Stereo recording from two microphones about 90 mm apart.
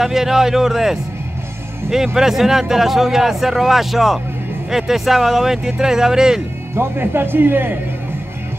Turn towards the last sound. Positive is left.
turn(degrees=-25)  # may be behind; listen again after turning